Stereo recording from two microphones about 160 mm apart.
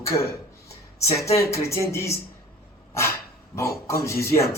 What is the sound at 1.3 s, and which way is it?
Speech, 20° left (ahead or behind).